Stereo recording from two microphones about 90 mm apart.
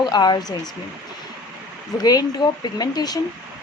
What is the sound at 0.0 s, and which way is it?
Speech, 50° left (ahead or behind).